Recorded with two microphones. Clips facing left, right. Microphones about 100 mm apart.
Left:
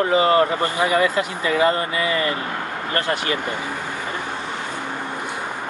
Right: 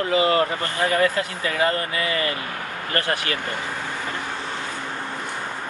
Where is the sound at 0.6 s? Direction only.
15° left (ahead or behind).